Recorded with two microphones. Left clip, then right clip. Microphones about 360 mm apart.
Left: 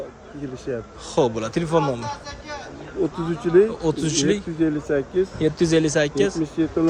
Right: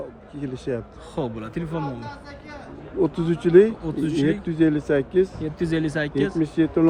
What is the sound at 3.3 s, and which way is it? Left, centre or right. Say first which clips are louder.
Speech: right 2 dB; right.